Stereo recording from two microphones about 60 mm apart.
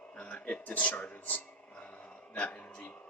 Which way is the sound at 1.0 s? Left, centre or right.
Left.